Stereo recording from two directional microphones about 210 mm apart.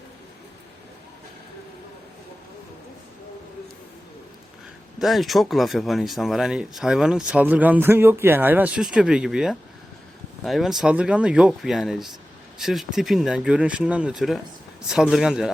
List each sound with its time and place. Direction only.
4.9 s speech: centre (ahead or behind)